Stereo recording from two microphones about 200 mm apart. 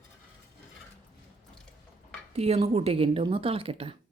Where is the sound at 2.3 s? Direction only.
30° right (ahead or behind).